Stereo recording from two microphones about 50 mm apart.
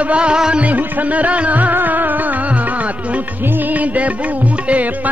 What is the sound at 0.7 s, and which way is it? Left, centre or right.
Music, right.